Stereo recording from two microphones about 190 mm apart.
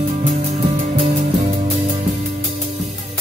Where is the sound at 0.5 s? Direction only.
40° right (ahead or behind).